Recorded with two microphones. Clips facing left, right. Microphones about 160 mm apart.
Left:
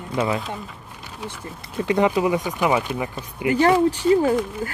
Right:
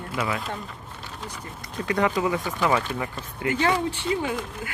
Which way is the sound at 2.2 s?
20° left (ahead or behind).